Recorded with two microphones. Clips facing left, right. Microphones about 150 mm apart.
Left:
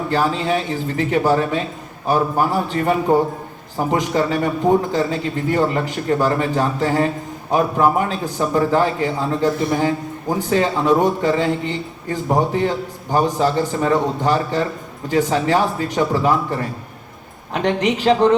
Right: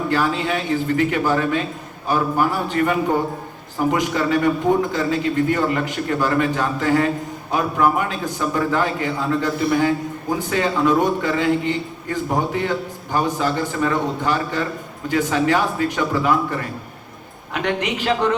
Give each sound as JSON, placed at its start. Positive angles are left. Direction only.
{"t": 0.1, "sound": "a man's voice", "side_deg": 35}